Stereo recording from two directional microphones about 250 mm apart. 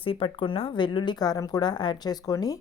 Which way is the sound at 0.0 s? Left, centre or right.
Left.